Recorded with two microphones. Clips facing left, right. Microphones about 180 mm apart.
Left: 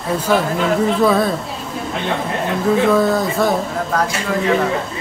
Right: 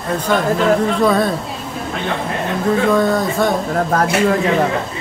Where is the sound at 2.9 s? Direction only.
Centre (ahead or behind).